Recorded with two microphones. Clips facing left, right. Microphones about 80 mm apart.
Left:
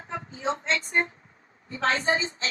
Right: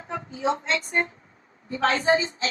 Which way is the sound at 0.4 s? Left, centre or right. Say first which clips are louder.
Right 3 dB; right.